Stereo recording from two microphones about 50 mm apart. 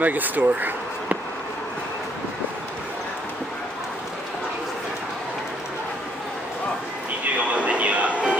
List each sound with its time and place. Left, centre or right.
0.0 s speech: right
7.3 s music: right